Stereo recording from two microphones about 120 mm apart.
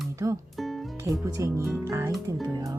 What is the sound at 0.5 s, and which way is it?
Music, centre (ahead or behind).